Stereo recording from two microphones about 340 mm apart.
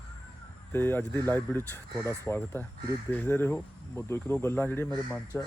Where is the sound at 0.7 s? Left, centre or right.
Centre.